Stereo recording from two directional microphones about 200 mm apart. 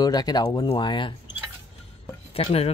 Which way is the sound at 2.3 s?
30° left (ahead or behind).